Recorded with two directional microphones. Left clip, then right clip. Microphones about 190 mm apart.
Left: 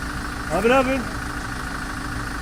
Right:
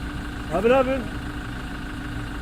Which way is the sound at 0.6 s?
50° left (ahead or behind).